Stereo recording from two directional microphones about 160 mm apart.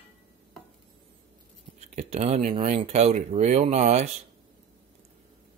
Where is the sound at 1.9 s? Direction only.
45° right (ahead or behind).